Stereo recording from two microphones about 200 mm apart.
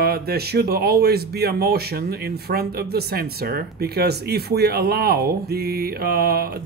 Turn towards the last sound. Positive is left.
turn(degrees=-50)  # may be behind; listen again after turning